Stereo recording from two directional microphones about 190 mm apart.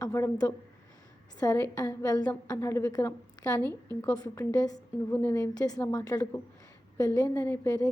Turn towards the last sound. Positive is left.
turn(degrees=15)  # may be behind; listen again after turning